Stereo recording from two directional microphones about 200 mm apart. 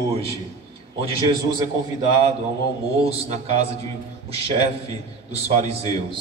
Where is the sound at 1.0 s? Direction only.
25° right (ahead or behind).